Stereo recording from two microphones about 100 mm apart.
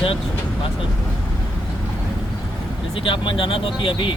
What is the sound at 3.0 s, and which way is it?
Speech, 60° left (ahead or behind).